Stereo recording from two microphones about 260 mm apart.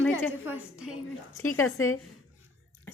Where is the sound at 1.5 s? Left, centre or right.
Left.